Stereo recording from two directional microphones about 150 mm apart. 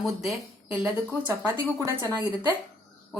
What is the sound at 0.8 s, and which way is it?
A woman's voice, 10° right (ahead or behind).